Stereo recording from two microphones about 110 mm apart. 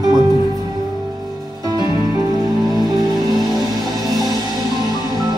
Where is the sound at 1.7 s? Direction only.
35° right (ahead or behind).